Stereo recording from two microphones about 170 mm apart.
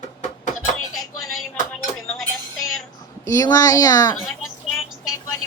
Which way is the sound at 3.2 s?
20° left (ahead or behind).